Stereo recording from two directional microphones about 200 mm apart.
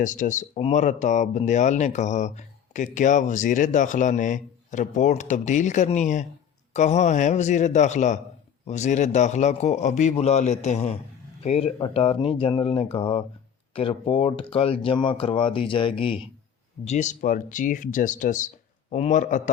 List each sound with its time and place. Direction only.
0.0 s speech: 40° left (ahead or behind)